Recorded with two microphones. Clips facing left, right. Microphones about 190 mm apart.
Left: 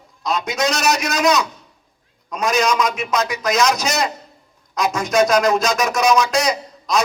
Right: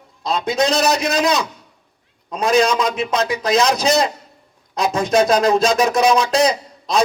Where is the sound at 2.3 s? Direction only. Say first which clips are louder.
Right 3 dB; 30° right (ahead or behind).